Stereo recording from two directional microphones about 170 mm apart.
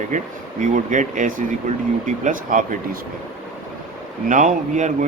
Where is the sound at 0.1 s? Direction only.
50° right (ahead or behind).